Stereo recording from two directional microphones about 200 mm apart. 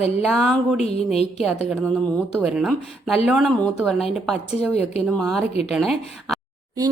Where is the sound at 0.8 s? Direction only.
30° left (ahead or behind).